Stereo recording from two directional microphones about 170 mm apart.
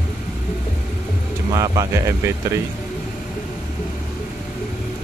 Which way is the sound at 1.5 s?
20° right (ahead or behind).